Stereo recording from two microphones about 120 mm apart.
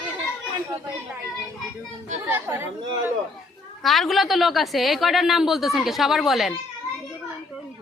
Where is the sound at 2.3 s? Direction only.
20° right (ahead or behind).